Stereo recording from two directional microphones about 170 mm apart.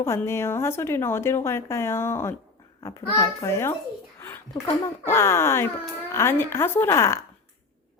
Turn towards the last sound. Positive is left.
turn(degrees=15)  # may be behind; listen again after turning